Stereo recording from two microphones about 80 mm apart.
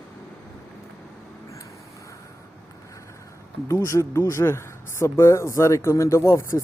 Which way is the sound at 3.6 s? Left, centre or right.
Left.